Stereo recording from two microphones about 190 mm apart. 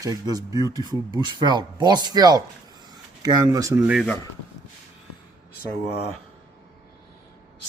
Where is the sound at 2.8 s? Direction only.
20° right (ahead or behind).